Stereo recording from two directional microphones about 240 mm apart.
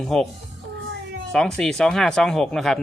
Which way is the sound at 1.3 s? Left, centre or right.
Centre.